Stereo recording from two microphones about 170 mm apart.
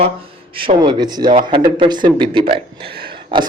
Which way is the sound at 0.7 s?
25° right (ahead or behind).